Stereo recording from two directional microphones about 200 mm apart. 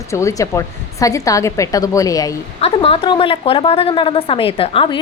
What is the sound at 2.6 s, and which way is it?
A woman's voice, 30° left (ahead or behind).